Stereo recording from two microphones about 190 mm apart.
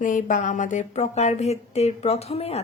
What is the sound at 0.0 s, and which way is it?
Speech, 45° left (ahead or behind).